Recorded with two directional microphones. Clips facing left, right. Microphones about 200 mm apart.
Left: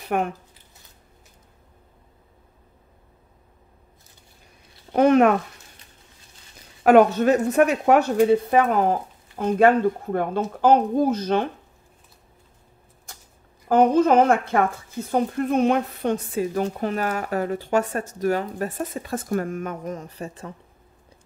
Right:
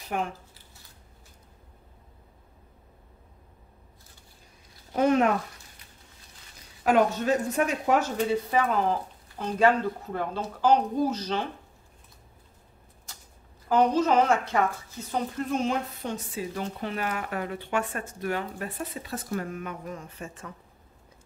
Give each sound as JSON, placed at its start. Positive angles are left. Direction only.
{"t": 0.0, "sound": "speech", "side_deg": 60}
{"t": 4.9, "sound": "speech", "side_deg": 65}
{"t": 6.8, "sound": "speech", "side_deg": 65}
{"t": 13.1, "sound": "a sound", "side_deg": 55}
{"t": 13.7, "sound": "speech", "side_deg": 55}